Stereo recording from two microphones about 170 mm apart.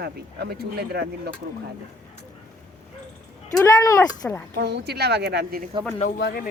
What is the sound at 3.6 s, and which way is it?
Speech, 20° left (ahead or behind).